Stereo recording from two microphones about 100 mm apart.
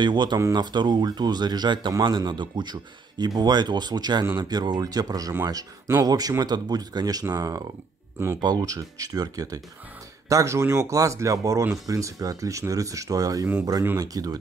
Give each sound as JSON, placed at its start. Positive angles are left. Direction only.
{"t": 0.0, "sound": "speech", "side_deg": -50}